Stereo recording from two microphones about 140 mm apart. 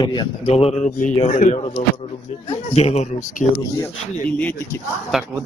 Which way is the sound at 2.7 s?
50° left (ahead or behind).